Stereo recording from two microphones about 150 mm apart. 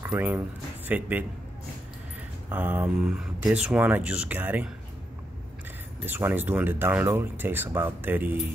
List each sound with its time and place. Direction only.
0.0 s speech: 15° right (ahead or behind)
2.5 s speech: 10° right (ahead or behind)
6.0 s speech: 15° right (ahead or behind)